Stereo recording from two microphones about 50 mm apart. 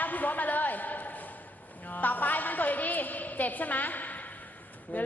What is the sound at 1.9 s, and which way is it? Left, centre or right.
A woman's voice, left.